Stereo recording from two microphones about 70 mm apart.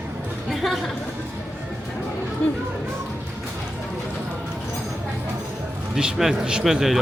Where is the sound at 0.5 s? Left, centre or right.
Centre.